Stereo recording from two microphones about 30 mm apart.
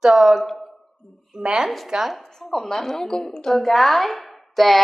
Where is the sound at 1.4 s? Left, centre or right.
Right.